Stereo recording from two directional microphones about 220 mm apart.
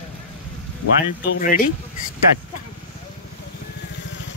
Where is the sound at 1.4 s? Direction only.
40° left (ahead or behind).